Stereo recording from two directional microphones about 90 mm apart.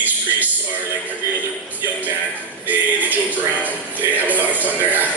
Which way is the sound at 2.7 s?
20° right (ahead or behind).